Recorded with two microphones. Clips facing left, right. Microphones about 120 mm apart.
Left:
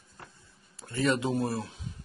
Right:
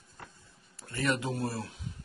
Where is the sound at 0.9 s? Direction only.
25° left (ahead or behind).